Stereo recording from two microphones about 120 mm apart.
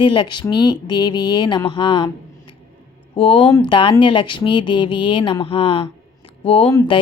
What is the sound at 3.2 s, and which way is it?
Speech, 45° left (ahead or behind).